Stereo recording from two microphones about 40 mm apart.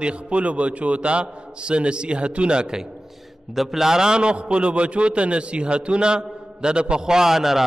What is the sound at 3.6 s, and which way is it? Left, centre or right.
A man's voice, centre.